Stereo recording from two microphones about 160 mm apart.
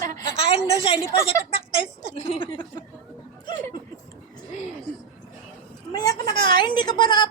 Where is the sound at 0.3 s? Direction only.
35° left (ahead or behind).